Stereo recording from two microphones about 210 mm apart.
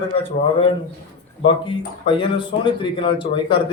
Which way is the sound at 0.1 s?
25° left (ahead or behind).